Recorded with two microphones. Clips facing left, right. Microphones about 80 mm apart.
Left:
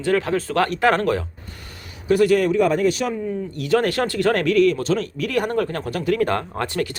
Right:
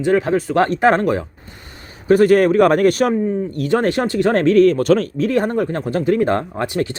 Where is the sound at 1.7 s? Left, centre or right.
Right.